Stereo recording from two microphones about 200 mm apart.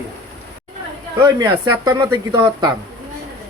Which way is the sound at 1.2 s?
20° right (ahead or behind).